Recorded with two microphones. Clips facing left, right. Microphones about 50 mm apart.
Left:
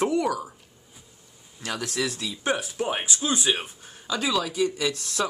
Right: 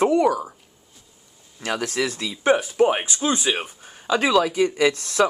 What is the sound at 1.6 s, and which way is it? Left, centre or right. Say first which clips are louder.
Speech: right 5 dB; right.